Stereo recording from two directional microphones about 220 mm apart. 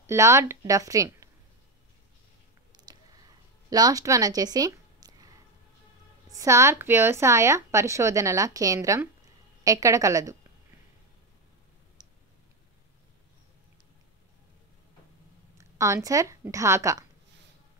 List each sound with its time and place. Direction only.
0.0 s speech: 10° right (ahead or behind)
2.9 s a sound: 15° right (ahead or behind)
6.3 s a woman's voice: 15° right (ahead or behind)
12.0 s tick: 20° right (ahead or behind)
15.5 s speech: 15° right (ahead or behind)